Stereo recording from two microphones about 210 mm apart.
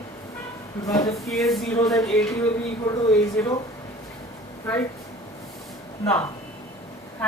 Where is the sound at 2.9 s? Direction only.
15° left (ahead or behind).